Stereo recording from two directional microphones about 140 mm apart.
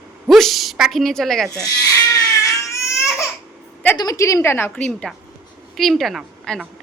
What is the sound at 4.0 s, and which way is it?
A woman's voice, 25° left (ahead or behind).